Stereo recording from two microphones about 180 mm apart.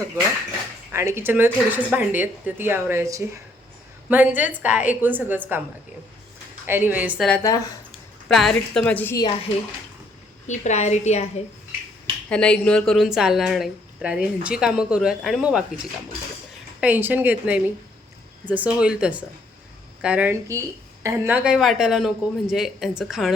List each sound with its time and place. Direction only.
0.9 s speech: 15° right (ahead or behind)
6.7 s speech: 10° right (ahead or behind)
7.3 s a woman's voice: 10° left (ahead or behind)
10.4 s a woman's voice: 40° left (ahead or behind)
12.3 s a woman's voice: 5° left (ahead or behind)
16.8 s a woman's voice: 10° right (ahead or behind)